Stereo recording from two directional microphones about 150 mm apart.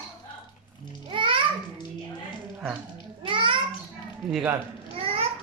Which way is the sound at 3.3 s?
35° right (ahead or behind).